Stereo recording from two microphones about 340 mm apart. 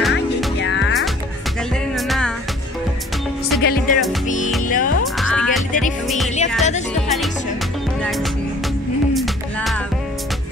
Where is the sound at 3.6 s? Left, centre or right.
Left.